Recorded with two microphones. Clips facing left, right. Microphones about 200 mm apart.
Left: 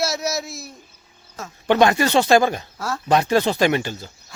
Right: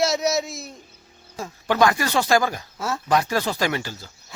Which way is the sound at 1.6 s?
25° left (ahead or behind).